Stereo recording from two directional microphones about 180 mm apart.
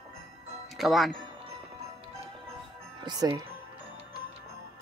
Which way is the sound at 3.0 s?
25° right (ahead or behind).